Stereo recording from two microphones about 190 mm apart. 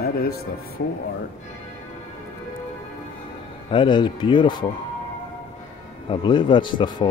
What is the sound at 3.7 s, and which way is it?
Speech, 25° left (ahead or behind).